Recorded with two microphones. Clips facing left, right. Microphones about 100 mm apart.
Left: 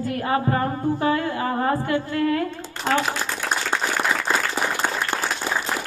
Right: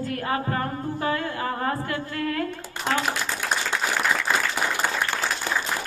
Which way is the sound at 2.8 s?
5° right (ahead or behind).